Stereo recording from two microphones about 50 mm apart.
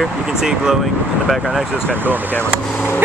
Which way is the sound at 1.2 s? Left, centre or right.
Centre.